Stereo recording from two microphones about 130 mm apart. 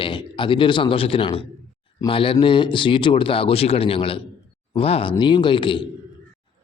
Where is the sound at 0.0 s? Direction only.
40° left (ahead or behind).